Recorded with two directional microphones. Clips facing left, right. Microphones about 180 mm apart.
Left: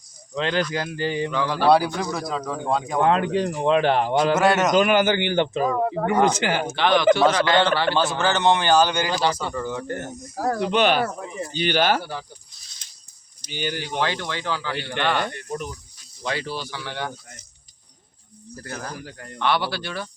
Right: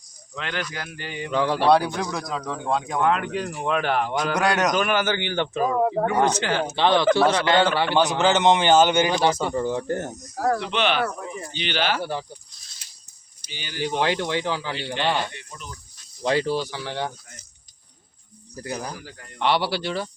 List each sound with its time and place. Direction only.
0.3 s speech: 30° left (ahead or behind)
1.3 s speech: 30° right (ahead or behind)
1.6 s speech: 5° left (ahead or behind)
3.0 s speech: 30° left (ahead or behind)
3.2 s speech: 20° left (ahead or behind)
4.4 s speech: centre (ahead or behind)
4.7 s speech: 15° left (ahead or behind)
7.5 s speech: 10° right (ahead or behind); by 10.1 s 30° right (ahead or behind)
10.6 s speech: 45° left (ahead or behind)
13.5 s speech: 50° left (ahead or behind)
14.0 s speech: 20° right (ahead or behind)
15.2 s speech: 50° left (ahead or behind)
16.2 s speech: 30° right (ahead or behind)
18.5 s speech: 15° right (ahead or behind)